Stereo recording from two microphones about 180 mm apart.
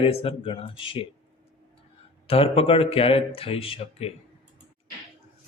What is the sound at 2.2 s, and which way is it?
A man's voice, 30° left (ahead or behind).